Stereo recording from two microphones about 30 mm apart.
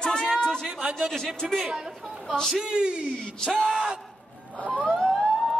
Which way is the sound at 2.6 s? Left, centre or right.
Right.